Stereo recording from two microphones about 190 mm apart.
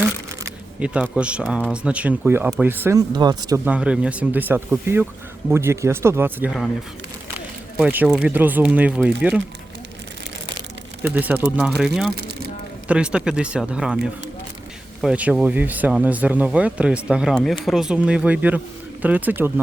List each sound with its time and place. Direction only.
0.0 s camera: 10° right (ahead or behind)
1.7 s speech: 5° right (ahead or behind)
3.1 s speech: 20° right (ahead or behind)
3.6 s speech: 5° right (ahead or behind)
11.0 s speech: 10° right (ahead or behind)